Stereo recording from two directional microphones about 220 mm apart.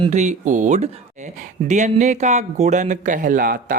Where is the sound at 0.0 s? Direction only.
30° right (ahead or behind).